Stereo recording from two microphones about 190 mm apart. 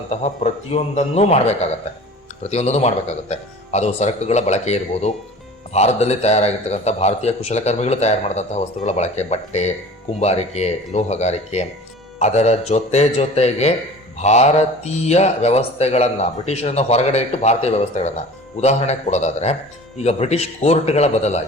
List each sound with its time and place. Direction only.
0.1 s speech: 35° left (ahead or behind)